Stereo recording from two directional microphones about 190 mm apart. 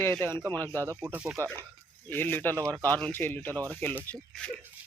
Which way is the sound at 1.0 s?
5° right (ahead or behind).